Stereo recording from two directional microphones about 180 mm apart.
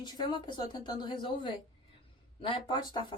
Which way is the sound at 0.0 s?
25° left (ahead or behind).